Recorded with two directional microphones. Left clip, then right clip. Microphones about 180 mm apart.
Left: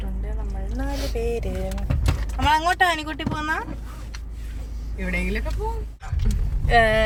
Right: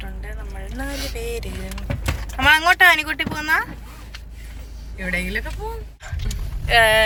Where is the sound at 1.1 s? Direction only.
60° left (ahead or behind).